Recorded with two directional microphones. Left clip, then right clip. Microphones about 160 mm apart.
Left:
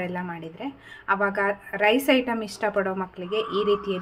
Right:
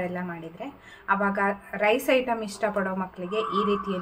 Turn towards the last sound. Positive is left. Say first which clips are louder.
# left 2 dB
turn(degrees=25)  # may be behind; listen again after turning